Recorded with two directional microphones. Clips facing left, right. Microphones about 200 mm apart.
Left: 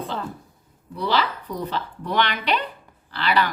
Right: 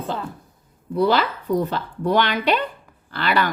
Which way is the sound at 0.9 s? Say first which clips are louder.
Right 5 dB; 50° right (ahead or behind).